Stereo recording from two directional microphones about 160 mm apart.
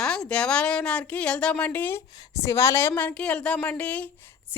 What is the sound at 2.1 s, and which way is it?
Speech, 25° left (ahead or behind).